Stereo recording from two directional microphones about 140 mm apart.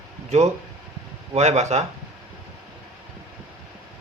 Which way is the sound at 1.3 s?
55° right (ahead or behind).